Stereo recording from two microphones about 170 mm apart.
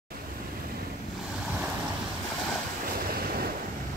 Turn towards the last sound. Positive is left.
turn(degrees=-60)  # may be behind; listen again after turning